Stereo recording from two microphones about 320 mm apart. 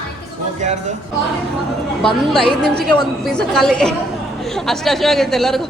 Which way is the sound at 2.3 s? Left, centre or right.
Centre.